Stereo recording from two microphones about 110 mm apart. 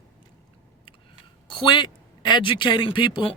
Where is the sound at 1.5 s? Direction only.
45° left (ahead or behind).